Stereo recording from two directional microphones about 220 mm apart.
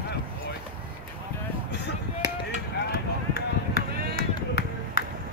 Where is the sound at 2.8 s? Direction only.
45° left (ahead or behind).